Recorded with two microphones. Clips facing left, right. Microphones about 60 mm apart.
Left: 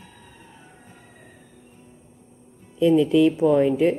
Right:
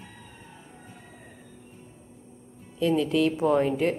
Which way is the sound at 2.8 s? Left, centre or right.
Centre.